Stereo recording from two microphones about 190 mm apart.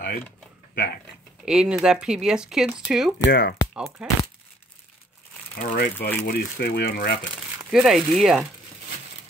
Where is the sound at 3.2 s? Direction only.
60° left (ahead or behind).